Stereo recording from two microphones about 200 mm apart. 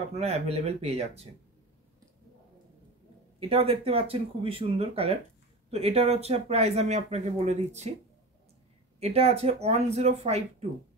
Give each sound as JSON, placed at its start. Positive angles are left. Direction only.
{"t": 0.1, "sound": "speech", "side_deg": -30}
{"t": 3.3, "sound": "speech", "side_deg": -30}
{"t": 9.0, "sound": "speech", "side_deg": -30}